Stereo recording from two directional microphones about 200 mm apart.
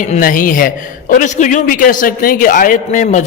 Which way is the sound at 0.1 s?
45° left (ahead or behind).